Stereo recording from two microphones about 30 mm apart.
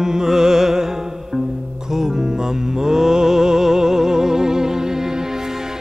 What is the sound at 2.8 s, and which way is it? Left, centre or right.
Music, centre.